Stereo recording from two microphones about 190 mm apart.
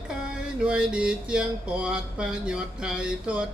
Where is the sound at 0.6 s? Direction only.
5° right (ahead or behind).